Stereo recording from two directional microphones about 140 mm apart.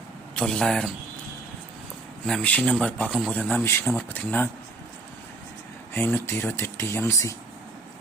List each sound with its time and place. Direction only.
0.3 s speech: 5° left (ahead or behind)
2.2 s speech: 5° left (ahead or behind)
5.9 s speech: 15° left (ahead or behind)